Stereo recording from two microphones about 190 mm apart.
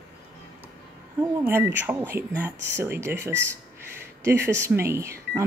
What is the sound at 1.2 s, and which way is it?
Speech, 10° right (ahead or behind).